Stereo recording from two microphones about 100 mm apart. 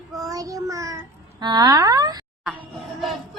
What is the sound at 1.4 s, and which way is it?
Child singing, 45° right (ahead or behind).